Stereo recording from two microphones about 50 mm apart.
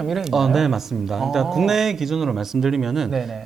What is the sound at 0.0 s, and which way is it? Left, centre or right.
Speech, centre.